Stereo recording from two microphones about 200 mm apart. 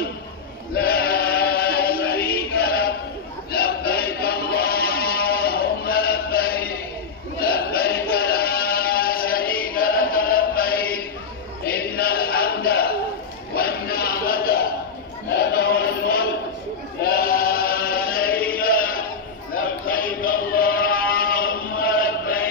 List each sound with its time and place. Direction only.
0.7 s chant: 50° left (ahead or behind)
3.5 s music: 50° left (ahead or behind)
7.3 s a sound: 50° left (ahead or behind)
8.1 s chant: 50° left (ahead or behind)
13.6 s a sound: 50° left (ahead or behind)
15.3 s music: 55° left (ahead or behind)
17.0 s chant: 50° left (ahead or behind)
20.2 s chant: 45° left (ahead or behind)